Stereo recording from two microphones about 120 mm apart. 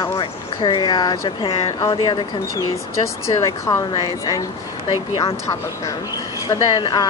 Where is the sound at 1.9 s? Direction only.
35° left (ahead or behind).